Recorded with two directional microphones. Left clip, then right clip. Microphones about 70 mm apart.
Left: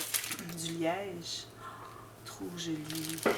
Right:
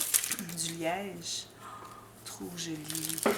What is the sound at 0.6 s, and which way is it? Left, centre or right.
Speech, right.